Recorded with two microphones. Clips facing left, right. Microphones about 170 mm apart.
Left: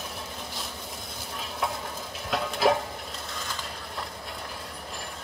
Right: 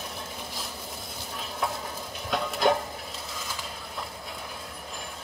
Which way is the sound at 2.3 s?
Centre (ahead or behind).